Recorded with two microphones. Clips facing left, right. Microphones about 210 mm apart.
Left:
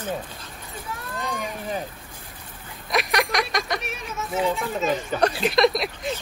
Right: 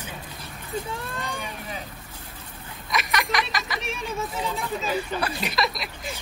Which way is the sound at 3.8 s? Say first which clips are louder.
Right 2 dB; 30° right (ahead or behind).